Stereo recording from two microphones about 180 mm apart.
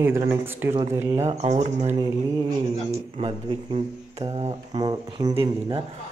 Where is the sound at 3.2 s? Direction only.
30° right (ahead or behind).